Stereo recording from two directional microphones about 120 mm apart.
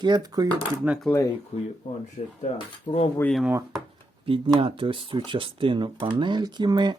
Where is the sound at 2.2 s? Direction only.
85° left.